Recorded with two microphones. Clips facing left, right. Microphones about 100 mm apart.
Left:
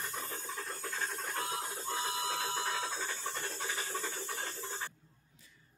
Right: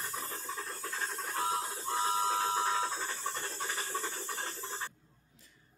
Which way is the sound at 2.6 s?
Centre (ahead or behind).